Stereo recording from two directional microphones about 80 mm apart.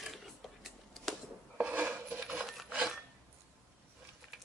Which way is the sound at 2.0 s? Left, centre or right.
Centre.